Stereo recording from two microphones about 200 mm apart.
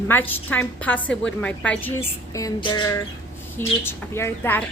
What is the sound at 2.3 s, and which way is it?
A woman's voice, 20° left (ahead or behind).